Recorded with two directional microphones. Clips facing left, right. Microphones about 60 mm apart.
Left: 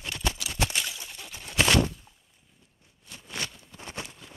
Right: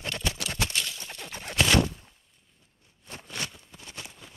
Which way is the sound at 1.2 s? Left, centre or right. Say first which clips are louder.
Right 4 dB; right.